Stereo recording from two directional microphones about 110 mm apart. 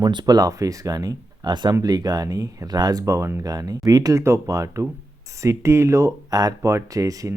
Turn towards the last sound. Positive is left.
turn(degrees=-30)  # may be behind; listen again after turning